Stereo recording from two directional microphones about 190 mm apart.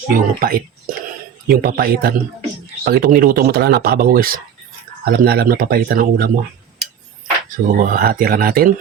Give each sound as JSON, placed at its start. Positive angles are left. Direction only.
{"t": 0.1, "sound": "speech", "side_deg": -50}
{"t": 7.7, "sound": "speech", "side_deg": -45}